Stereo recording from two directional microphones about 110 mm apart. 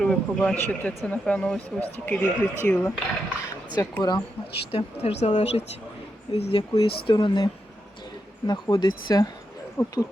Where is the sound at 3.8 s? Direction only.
30° left (ahead or behind).